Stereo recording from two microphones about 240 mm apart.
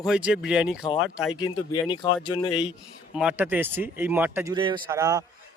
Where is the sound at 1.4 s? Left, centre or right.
Centre.